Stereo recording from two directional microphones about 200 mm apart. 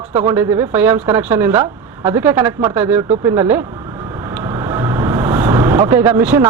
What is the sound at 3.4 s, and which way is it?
Speech, 10° right (ahead or behind).